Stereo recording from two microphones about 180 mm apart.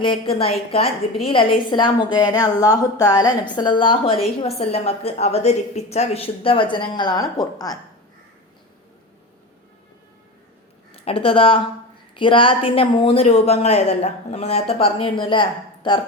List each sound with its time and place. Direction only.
0.0 s a woman's voice: 30° left (ahead or behind)
10.9 s a woman's voice: 30° left (ahead or behind)